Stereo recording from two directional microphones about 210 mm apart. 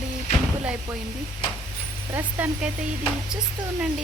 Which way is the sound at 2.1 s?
10° right (ahead or behind).